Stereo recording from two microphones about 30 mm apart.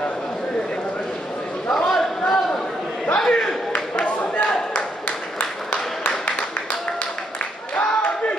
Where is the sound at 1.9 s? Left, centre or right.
Centre.